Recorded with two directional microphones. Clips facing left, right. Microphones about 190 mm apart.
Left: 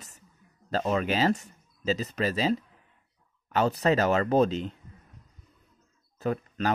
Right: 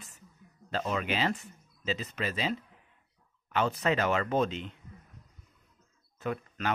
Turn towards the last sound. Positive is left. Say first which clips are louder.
# left 5 dB
turn(degrees=35)  # may be behind; listen again after turning